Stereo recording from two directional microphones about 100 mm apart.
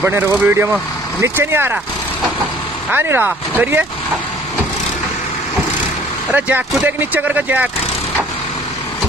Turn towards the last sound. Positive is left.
turn(degrees=-15)  # may be behind; listen again after turning